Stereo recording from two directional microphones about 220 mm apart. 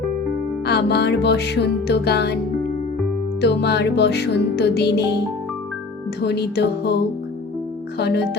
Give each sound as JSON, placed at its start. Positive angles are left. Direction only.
{"t": 0.6, "sound": "music", "side_deg": 50}
{"t": 3.4, "sound": "music", "side_deg": 50}
{"t": 6.1, "sound": "music", "side_deg": 50}